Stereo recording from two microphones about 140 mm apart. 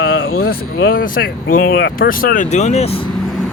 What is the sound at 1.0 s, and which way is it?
Speech, 90° left.